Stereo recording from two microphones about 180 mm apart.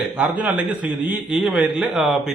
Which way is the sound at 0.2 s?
5° right (ahead or behind).